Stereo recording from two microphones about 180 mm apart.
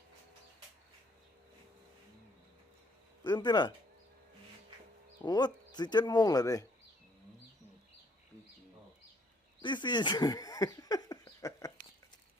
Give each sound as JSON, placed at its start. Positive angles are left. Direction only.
{"t": 3.2, "sound": "speech", "side_deg": 25}
{"t": 5.2, "sound": "speech", "side_deg": 25}
{"t": 9.6, "sound": "speech", "side_deg": 25}